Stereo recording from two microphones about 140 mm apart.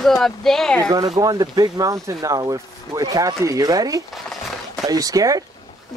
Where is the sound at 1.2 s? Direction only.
25° right (ahead or behind).